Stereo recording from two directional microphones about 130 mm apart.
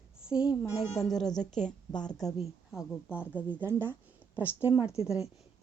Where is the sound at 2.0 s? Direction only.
30° left (ahead or behind).